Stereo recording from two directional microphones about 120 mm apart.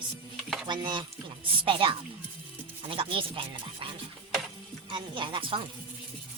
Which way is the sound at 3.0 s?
45° right (ahead or behind).